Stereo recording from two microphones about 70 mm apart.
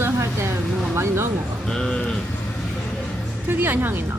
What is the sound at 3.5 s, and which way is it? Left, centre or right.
Speech, right.